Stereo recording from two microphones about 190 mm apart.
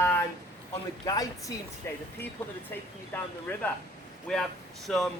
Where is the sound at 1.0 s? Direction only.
20° left (ahead or behind).